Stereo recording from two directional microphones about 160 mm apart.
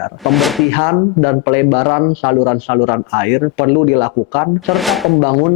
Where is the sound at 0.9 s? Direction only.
20° left (ahead or behind).